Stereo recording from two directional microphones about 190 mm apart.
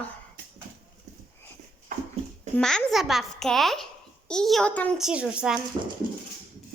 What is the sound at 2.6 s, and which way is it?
A child's voice, 5° left (ahead or behind).